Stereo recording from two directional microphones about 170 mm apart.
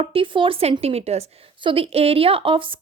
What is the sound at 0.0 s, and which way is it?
A woman's voice, 30° right (ahead or behind).